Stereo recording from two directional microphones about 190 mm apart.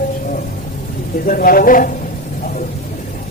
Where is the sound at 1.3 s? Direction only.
50° left (ahead or behind).